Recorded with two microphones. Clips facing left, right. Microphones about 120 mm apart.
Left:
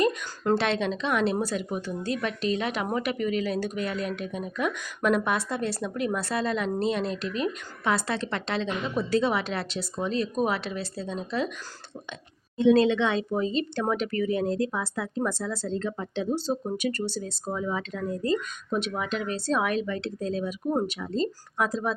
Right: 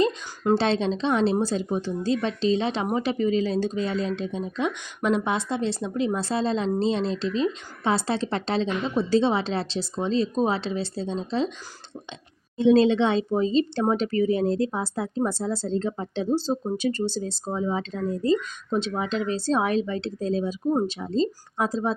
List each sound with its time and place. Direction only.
0.5 s speech: 30° right (ahead or behind)
12.5 s speech: 30° right (ahead or behind)